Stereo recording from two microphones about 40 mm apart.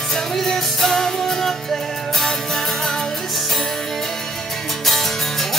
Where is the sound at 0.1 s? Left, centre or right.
Centre.